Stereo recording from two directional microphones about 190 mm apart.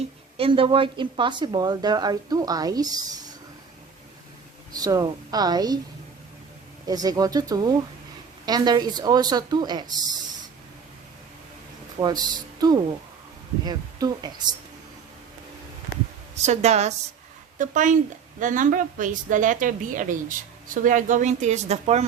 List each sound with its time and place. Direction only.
0.3 s a woman's voice: 30° right (ahead or behind)
4.7 s a woman's voice: 20° right (ahead or behind)
6.8 s a woman's voice: 20° right (ahead or behind)
12.0 s a woman's voice: 20° right (ahead or behind)
16.3 s a woman's voice: 35° right (ahead or behind)